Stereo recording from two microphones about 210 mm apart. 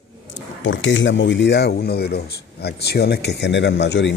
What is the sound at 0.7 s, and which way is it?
A man's voice, 65° left (ahead or behind).